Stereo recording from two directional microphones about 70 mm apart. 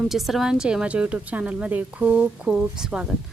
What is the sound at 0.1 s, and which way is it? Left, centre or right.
A woman's voice, centre.